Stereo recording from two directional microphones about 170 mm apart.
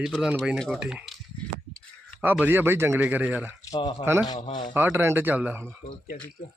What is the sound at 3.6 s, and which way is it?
Speech, 20° left (ahead or behind).